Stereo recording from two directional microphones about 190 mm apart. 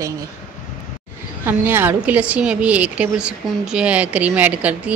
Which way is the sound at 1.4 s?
10° right (ahead or behind).